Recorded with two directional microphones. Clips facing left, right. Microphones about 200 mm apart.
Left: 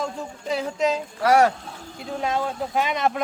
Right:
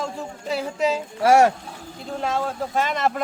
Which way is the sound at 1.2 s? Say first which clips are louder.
Right 2 dB; 25° right (ahead or behind).